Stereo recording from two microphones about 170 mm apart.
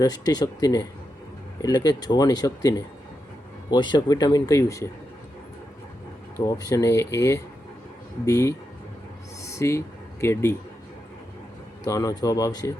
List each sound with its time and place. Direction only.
0.0 s speech: 25° left (ahead or behind)
6.4 s speech: 20° left (ahead or behind)
9.4 s a sound: 15° left (ahead or behind)
11.9 s speech: 20° left (ahead or behind)